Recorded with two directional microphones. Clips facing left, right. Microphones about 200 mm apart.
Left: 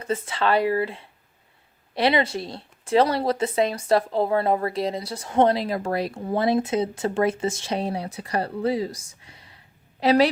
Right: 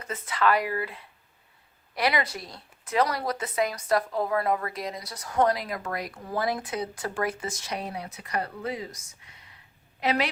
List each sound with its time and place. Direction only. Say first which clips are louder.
0.0 s a woman's voice: left 2 dB; 30° left (ahead or behind)